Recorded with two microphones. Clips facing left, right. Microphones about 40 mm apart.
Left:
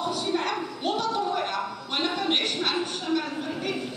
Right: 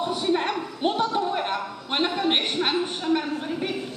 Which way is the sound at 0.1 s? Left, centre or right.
Right.